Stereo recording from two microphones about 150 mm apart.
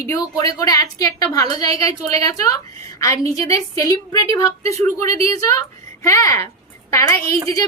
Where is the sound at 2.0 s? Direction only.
45° right (ahead or behind).